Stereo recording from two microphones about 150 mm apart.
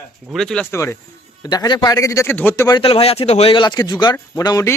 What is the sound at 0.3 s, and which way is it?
Speech, 5° left (ahead or behind).